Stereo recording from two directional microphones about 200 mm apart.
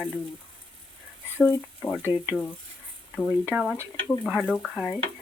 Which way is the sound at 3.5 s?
10° right (ahead or behind).